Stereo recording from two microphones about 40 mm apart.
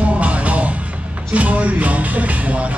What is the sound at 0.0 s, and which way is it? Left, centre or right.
Music, right.